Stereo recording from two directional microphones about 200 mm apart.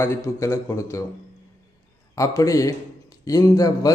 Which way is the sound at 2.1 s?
15° left (ahead or behind).